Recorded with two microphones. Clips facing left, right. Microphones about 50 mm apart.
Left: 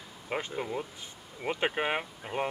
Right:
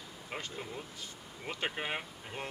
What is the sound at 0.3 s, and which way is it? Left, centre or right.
Speech, left.